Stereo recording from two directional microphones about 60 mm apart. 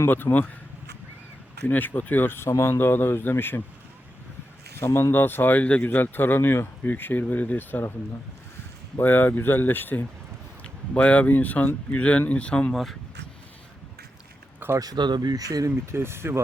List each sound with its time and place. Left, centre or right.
0.1 s speech: left
1.6 s speech: left
4.8 s speech: left
5.1 s speech: left
9.0 s speech: left
10.6 s speech: left
12.7 s speech: centre
14.6 s a sound: right
15.4 s speech: right
15.9 s speech: right